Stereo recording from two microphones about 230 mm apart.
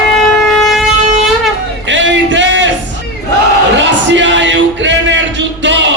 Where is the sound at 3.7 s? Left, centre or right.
Right.